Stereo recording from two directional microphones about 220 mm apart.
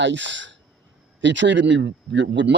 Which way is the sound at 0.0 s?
55° right (ahead or behind).